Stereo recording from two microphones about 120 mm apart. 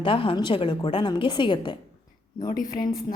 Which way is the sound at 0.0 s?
45° left (ahead or behind).